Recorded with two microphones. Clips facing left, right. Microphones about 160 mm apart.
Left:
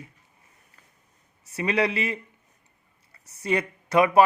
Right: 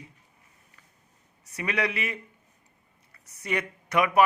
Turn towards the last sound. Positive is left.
turn(degrees=30)  # may be behind; listen again after turning